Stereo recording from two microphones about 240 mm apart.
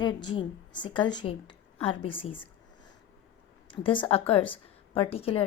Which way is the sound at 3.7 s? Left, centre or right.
Left.